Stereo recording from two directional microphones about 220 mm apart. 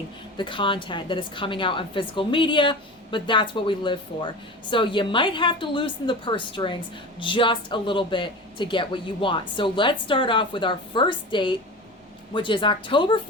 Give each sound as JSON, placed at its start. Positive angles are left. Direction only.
{"t": 0.3, "sound": "speech", "side_deg": 20}